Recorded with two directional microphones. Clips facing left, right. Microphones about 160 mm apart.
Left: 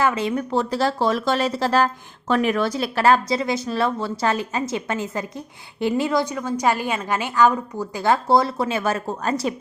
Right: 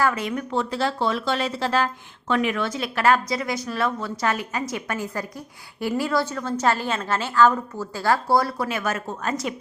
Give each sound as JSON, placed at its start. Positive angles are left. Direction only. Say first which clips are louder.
{"t": 0.0, "sound": "a woman's voice", "louder": "left 2 dB", "side_deg": 25}